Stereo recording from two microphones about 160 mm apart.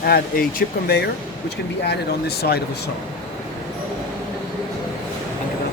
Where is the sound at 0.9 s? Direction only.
90° left.